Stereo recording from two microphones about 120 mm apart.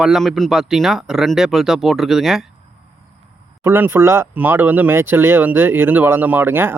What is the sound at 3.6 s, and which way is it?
Speech, 20° right (ahead or behind).